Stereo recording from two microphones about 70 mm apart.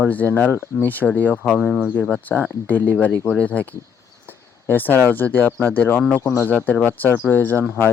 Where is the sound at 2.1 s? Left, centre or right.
Left.